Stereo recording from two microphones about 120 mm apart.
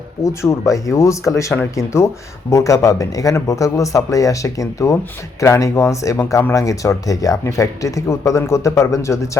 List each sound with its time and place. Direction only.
0.2 s speech: 25° left (ahead or behind)